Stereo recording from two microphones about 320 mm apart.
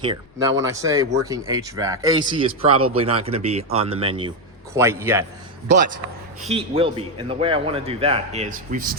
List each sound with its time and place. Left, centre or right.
0.0 s a man's voice: centre
6.5 s a man's voice: centre